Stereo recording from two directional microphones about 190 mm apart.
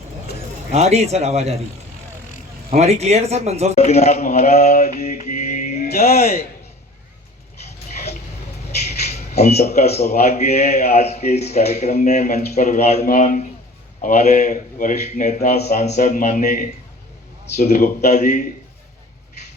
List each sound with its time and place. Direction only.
0.7 s speech: 35° right (ahead or behind)
2.6 s speech: 35° right (ahead or behind)
3.8 s a man's voice: 35° left (ahead or behind)
4.7 s a man's voice: 55° left (ahead or behind)
4.9 s speech: 40° left (ahead or behind)
9.3 s a man's voice: 35° left (ahead or behind)